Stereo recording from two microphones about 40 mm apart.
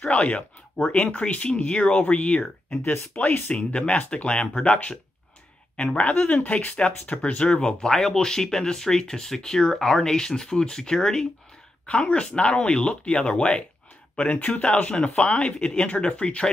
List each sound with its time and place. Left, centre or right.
0.0 s speech: left
5.8 s speech: left
7.8 s speech: centre
11.8 s speech: left